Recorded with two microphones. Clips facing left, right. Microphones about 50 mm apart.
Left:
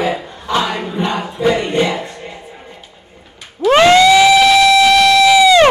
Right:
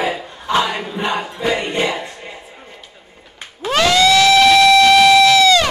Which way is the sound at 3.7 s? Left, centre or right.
Left.